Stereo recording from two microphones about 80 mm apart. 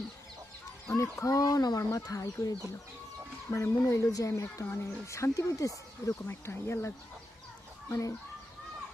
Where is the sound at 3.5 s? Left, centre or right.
Left.